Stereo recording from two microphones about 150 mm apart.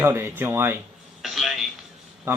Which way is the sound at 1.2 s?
Centre (ahead or behind).